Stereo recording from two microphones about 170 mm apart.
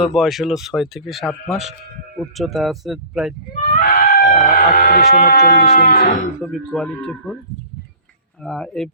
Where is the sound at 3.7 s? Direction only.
60° left (ahead or behind).